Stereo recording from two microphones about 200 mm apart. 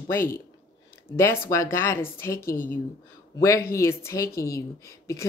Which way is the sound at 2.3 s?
45° left (ahead or behind).